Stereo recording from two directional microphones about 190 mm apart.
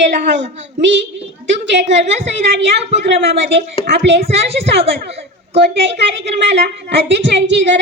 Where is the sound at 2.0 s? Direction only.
35° right (ahead or behind).